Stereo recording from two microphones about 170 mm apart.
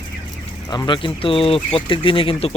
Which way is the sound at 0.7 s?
25° left (ahead or behind).